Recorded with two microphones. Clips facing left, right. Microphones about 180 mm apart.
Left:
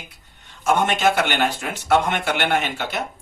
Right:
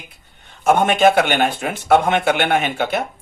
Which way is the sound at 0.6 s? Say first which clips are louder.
Right 5 dB; 55° right (ahead or behind).